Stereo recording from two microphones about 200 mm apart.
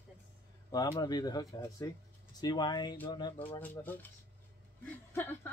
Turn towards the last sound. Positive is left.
turn(degrees=10)  # may be behind; listen again after turning